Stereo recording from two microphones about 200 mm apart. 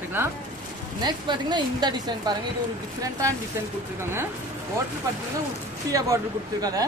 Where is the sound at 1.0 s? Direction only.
20° right (ahead or behind).